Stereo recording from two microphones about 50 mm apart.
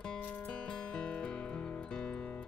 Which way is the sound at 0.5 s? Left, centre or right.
Centre.